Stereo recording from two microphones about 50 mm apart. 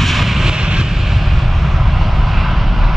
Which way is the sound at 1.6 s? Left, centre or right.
Centre.